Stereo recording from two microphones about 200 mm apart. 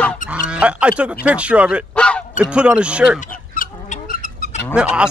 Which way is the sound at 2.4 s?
5° right (ahead or behind).